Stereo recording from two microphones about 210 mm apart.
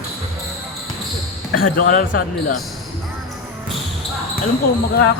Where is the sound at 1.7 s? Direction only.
40° left (ahead or behind).